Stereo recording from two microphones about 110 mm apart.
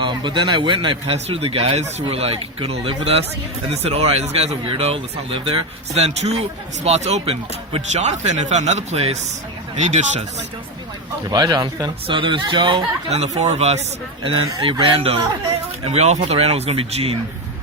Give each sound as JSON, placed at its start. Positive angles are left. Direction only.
{"t": 0.0, "sound": "a man's voice", "side_deg": -45}
{"t": 1.1, "sound": "speech", "side_deg": -60}
{"t": 4.8, "sound": "speech", "side_deg": -60}
{"t": 5.9, "sound": "speech", "side_deg": -75}
{"t": 9.8, "sound": "speech", "side_deg": -90}
{"t": 11.3, "sound": "speech", "side_deg": -40}
{"t": 12.0, "sound": "a man's voice", "side_deg": -50}
{"t": 13.1, "sound": "speech", "side_deg": -80}
{"t": 14.3, "sound": "speech", "side_deg": -55}
{"t": 15.9, "sound": "speech", "side_deg": -75}